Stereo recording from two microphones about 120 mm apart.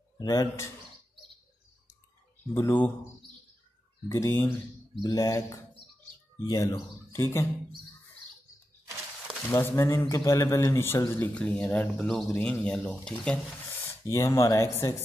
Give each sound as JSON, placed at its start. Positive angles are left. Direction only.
{"t": 0.2, "sound": "a man's voice", "side_deg": 30}
{"t": 2.5, "sound": "a man's voice", "side_deg": 20}
{"t": 4.1, "sound": "a man's voice", "side_deg": 25}
{"t": 9.5, "sound": "a man's voice", "side_deg": 20}
{"t": 14.0, "sound": "a man's voice", "side_deg": 25}